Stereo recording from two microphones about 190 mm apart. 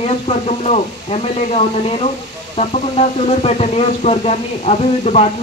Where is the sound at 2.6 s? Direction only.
35° left (ahead or behind).